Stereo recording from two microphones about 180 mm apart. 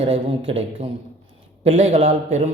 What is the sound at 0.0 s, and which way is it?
Speech, 35° right (ahead or behind).